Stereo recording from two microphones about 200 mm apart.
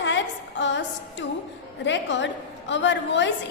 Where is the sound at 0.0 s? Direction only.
65° left (ahead or behind).